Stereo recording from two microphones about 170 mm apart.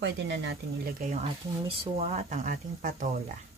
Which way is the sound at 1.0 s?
35° right (ahead or behind).